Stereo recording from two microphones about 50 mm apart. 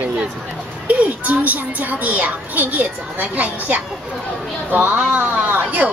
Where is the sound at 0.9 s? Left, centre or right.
Right.